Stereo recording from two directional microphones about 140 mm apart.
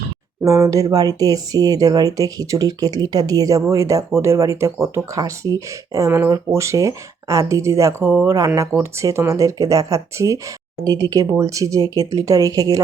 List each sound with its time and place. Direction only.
0.4 s speech: 20° right (ahead or behind)